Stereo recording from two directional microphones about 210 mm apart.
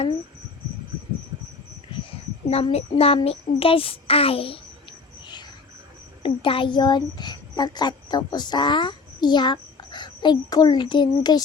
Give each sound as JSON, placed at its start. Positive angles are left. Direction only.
{"t": 2.5, "sound": "a child's voice", "side_deg": 30}